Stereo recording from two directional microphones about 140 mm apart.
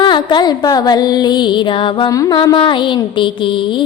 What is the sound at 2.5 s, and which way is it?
Music, 35° left (ahead or behind).